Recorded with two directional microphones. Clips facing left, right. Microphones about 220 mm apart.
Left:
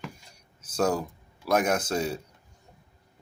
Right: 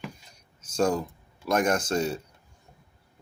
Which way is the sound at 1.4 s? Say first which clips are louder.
Even; 5° left (ahead or behind).